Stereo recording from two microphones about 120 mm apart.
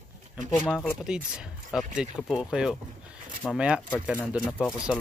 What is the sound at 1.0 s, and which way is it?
Speech, 5° right (ahead or behind).